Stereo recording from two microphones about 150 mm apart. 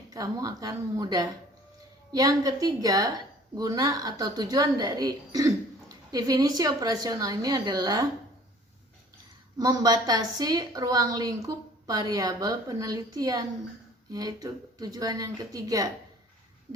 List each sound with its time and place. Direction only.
0.1 s a woman's voice: 25° right (ahead or behind)
9.6 s a woman's voice: 25° right (ahead or behind)